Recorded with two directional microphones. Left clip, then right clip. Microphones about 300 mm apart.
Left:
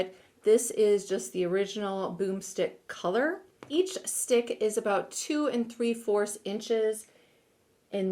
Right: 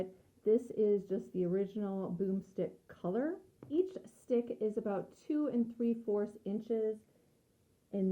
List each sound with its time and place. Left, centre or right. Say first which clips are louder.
0.0 s speech: left 8 dB; centre